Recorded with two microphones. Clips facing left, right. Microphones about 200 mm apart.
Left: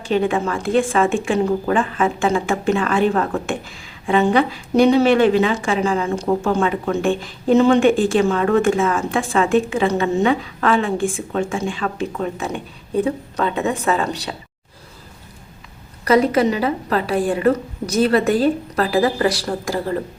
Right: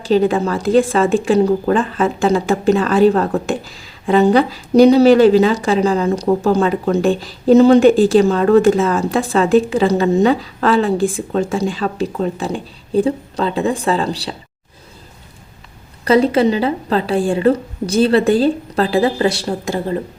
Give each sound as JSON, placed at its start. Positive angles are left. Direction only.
{"t": 0.0, "sound": "a woman's voice", "side_deg": -35}
{"t": 16.0, "sound": "a woman's voice", "side_deg": -30}